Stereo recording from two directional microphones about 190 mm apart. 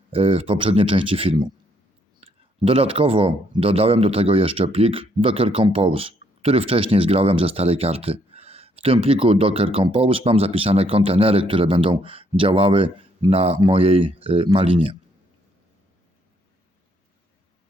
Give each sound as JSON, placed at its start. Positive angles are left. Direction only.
{"t": 0.1, "sound": "speech", "side_deg": -30}